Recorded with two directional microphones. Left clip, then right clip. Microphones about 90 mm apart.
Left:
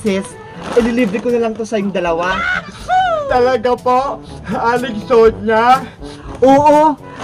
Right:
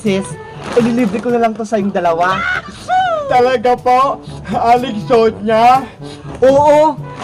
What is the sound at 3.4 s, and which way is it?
Speech, 20° left (ahead or behind).